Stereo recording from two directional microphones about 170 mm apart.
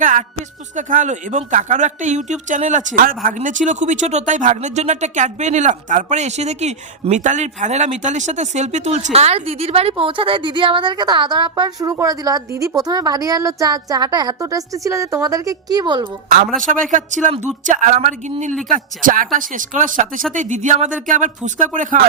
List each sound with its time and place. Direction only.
0.0 s speech: 50° right (ahead or behind); by 16.0 s 25° right (ahead or behind)
16.6 s speech: 50° right (ahead or behind)